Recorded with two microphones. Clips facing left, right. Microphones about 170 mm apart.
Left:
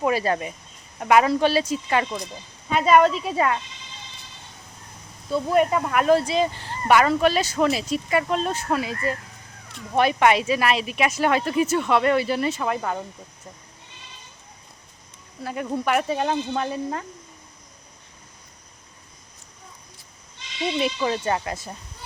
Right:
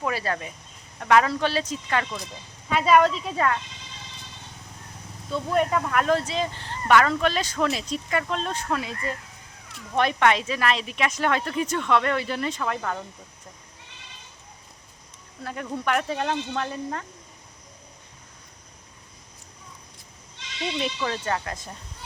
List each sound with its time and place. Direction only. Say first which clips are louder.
0.0 s speech: left 6 dB; 15° left (ahead or behind)
3.0 s speech: left 3 dB; 5° left (ahead or behind)
5.3 s speech: left 3 dB; 10° left (ahead or behind)
15.4 s speech: left 3 dB; 10° left (ahead or behind)
20.7 s speech: left 5 dB; 10° left (ahead or behind)